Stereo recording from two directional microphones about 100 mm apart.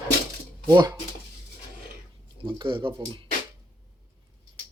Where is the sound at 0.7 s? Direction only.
40° right (ahead or behind).